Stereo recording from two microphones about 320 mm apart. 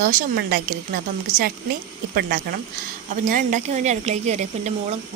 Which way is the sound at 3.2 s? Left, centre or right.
Right.